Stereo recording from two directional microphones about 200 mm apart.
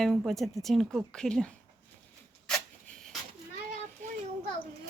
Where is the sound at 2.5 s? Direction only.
5° left (ahead or behind).